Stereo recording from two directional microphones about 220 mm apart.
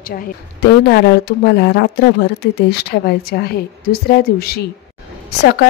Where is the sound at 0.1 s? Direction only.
40° left (ahead or behind).